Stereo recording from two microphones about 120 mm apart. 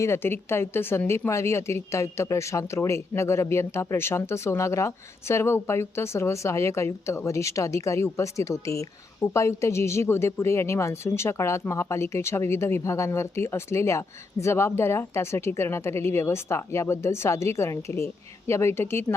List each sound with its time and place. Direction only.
0.0 s a woman's voice: 20° left (ahead or behind)